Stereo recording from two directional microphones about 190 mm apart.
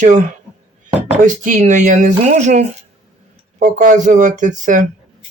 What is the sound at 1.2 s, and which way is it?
Speech, 40° right (ahead or behind).